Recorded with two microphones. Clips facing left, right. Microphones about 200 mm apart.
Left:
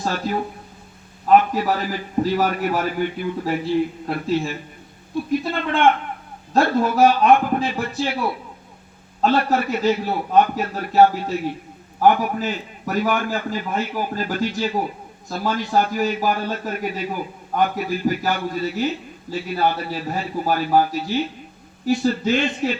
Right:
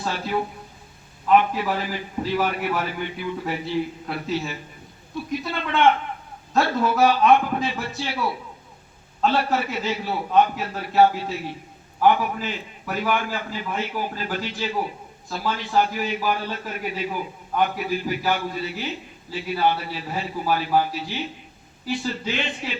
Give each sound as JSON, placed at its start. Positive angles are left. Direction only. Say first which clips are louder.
{"t": 0.0, "sound": "a man's voice", "louder": "left 2 dB", "side_deg": 40}
{"t": 6.9, "sound": "a man's voice", "louder": "left 2 dB", "side_deg": 50}